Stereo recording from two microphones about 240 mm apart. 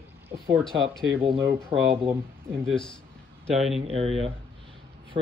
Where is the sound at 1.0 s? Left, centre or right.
Right.